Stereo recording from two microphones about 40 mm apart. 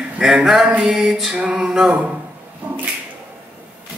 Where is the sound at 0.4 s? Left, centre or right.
Centre.